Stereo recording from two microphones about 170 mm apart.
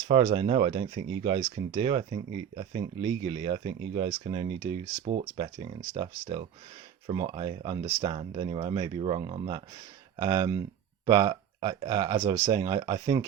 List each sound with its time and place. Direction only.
0.1 s speech: 30° right (ahead or behind)